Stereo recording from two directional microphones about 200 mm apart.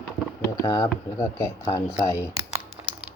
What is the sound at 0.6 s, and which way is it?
Speech, 20° left (ahead or behind).